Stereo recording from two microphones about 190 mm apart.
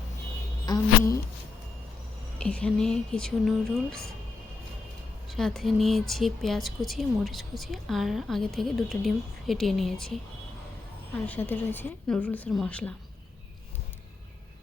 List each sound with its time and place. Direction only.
0.6 s a sound: 20° left (ahead or behind)
2.4 s speech: 5° left (ahead or behind)
5.3 s speech: centre (ahead or behind)
11.1 s a woman's voice: 10° left (ahead or behind)